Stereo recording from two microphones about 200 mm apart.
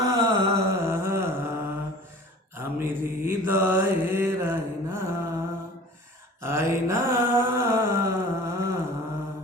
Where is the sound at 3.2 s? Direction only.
10° right (ahead or behind).